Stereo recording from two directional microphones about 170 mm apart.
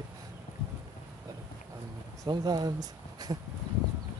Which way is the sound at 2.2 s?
25° right (ahead or behind).